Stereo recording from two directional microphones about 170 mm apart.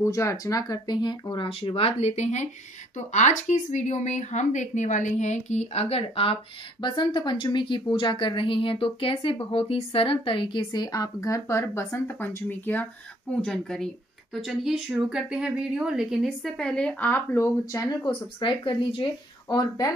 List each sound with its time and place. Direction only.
0.0 s a woman's voice: 15° left (ahead or behind)
18.0 s a woman's voice: 30° left (ahead or behind)